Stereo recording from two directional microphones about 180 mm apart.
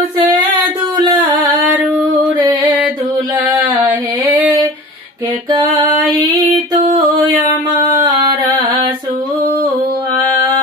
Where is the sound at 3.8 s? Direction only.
Centre (ahead or behind).